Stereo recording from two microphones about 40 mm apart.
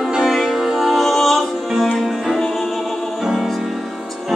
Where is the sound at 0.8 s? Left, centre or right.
Centre.